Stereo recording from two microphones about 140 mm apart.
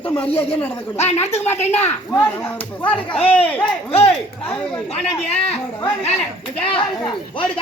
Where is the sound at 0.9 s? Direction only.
50° left (ahead or behind).